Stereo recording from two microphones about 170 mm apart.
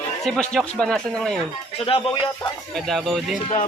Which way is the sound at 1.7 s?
30° left (ahead or behind).